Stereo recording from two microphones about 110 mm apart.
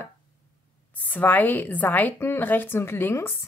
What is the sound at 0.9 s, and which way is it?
A woman's voice, 15° left (ahead or behind).